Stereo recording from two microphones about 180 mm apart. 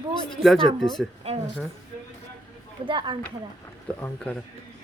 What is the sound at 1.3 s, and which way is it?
Speech, 35° right (ahead or behind).